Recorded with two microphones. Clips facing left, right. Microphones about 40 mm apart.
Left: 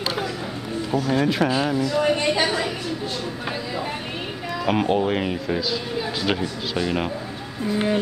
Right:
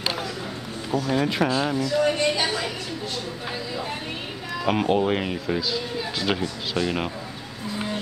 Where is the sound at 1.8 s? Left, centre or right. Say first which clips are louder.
Left 1 dB; centre.